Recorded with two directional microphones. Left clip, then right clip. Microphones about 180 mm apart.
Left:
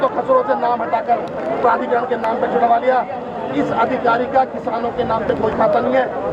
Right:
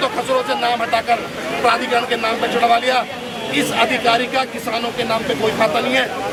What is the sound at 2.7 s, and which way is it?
A man's voice, 25° right (ahead or behind).